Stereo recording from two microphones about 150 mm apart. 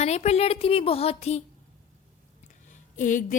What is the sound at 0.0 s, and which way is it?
Speech, 45° left (ahead or behind).